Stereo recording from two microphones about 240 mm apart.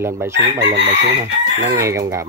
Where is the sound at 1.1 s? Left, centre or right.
Right.